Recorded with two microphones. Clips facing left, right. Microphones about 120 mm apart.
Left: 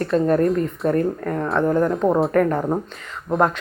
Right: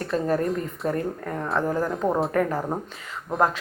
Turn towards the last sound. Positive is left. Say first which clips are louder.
# left 4 dB
turn(degrees=0)  # may be behind; listen again after turning